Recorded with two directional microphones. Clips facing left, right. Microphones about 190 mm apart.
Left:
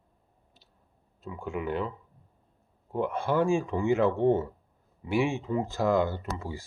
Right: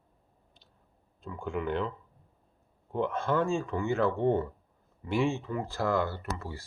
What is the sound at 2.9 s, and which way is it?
Speech, 10° left (ahead or behind).